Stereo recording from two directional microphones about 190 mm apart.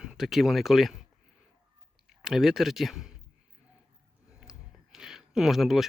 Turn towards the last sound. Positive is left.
turn(degrees=0)  # may be behind; listen again after turning